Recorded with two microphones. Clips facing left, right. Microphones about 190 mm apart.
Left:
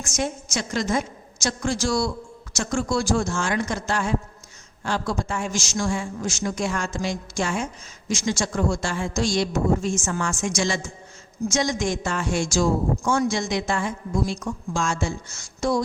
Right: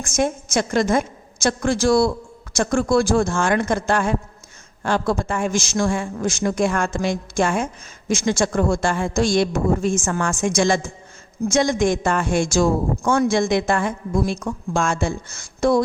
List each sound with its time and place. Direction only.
0.0 s a man's voice: 55° right (ahead or behind)